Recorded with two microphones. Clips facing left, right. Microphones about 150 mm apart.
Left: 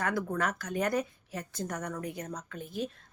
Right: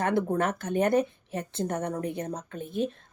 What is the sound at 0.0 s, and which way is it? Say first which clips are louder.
A woman's voice: right 5 dB; 25° right (ahead or behind).